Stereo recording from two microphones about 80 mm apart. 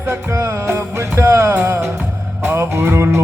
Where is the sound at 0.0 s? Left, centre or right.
Right.